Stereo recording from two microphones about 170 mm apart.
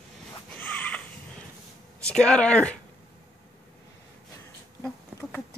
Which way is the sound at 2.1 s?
5° left (ahead or behind).